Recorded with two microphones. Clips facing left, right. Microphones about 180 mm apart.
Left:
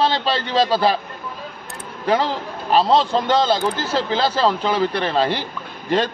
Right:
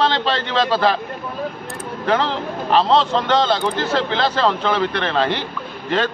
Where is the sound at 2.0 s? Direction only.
10° left (ahead or behind).